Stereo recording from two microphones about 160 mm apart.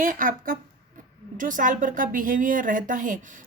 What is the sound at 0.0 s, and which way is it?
A woman's voice, 60° right (ahead or behind).